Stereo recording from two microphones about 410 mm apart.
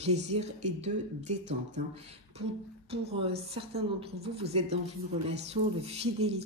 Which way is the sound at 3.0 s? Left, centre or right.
Centre.